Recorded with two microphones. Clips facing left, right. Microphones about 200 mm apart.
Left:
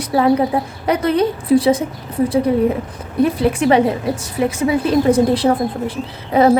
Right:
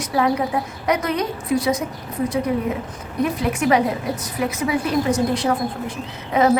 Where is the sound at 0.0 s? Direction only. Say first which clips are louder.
Left 5 dB; 30° left (ahead or behind).